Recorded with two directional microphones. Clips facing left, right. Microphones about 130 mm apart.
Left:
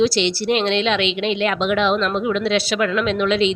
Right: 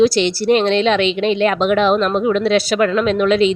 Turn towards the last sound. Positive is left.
turn(degrees=-45)  # may be behind; listen again after turning